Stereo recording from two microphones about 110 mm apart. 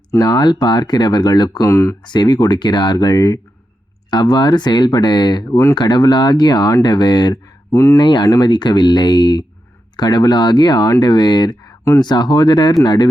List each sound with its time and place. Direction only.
0.1 s speech: 40° left (ahead or behind)
2.0 s speech: 40° left (ahead or behind)